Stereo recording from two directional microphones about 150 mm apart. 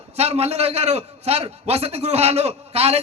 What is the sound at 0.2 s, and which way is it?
A man's voice, 45° right (ahead or behind).